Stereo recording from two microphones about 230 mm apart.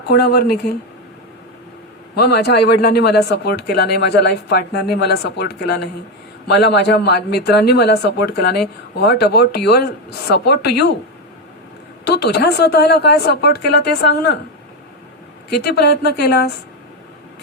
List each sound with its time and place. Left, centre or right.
0.1 s a man's voice: left
2.1 s a man's voice: left
12.0 s a man's voice: left
15.4 s a man's voice: left